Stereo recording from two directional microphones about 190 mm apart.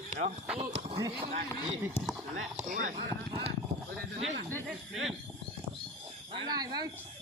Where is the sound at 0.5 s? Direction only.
30° right (ahead or behind).